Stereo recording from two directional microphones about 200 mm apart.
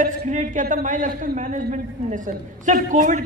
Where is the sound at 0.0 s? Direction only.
40° right (ahead or behind).